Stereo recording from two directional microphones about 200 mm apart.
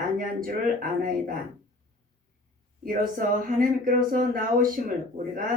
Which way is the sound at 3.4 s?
45° right (ahead or behind).